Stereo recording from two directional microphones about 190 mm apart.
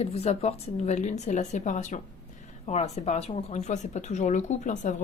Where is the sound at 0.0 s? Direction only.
35° left (ahead or behind).